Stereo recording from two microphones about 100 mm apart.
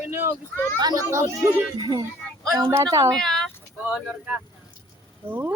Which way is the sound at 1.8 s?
50° right (ahead or behind).